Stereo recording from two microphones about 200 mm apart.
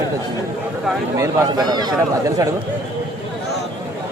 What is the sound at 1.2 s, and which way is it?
Speech, 15° right (ahead or behind).